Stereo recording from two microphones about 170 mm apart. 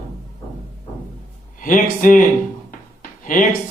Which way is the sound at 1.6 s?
50° left (ahead or behind).